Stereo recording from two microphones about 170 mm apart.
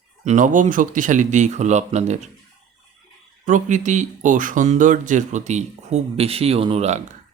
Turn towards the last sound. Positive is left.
turn(degrees=-40)  # may be behind; listen again after turning